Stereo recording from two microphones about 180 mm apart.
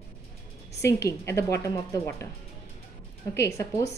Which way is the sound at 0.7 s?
15° left (ahead or behind).